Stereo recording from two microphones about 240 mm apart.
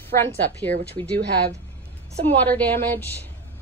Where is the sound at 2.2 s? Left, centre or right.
Centre.